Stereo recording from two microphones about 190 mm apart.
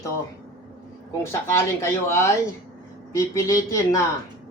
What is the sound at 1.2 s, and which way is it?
A man's voice, 15° left (ahead or behind).